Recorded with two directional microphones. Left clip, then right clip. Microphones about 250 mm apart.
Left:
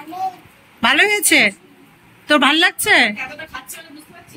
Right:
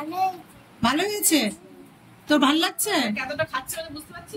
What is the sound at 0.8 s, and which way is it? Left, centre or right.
Speech, centre.